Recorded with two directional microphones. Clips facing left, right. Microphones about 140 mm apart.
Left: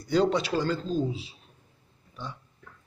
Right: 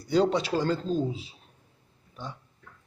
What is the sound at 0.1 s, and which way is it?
Speech, 30° right (ahead or behind).